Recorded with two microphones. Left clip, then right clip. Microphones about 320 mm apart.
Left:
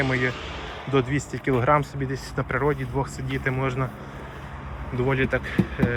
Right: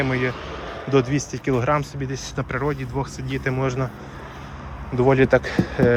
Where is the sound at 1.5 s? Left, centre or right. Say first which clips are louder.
Left 1 dB; centre.